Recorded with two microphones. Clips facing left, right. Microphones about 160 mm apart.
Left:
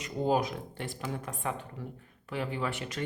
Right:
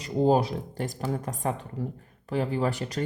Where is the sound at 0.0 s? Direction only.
30° right (ahead or behind).